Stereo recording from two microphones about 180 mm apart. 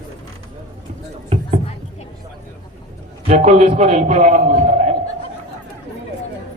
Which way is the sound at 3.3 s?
40° right (ahead or behind).